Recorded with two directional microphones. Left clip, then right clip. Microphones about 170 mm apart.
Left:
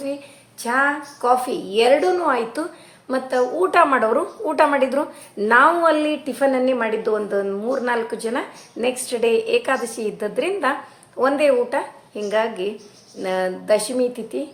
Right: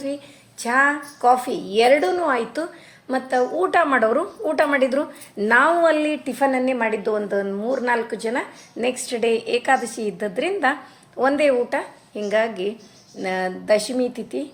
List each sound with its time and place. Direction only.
0.6 s a woman's voice: 15° right (ahead or behind)